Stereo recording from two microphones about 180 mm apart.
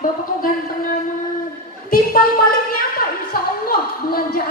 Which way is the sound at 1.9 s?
55° left (ahead or behind).